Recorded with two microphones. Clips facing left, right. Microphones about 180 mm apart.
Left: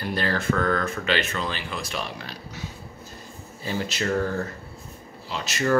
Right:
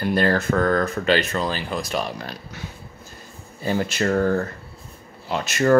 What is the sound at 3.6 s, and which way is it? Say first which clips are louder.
Speech: right 5 dB; 50° right (ahead or behind).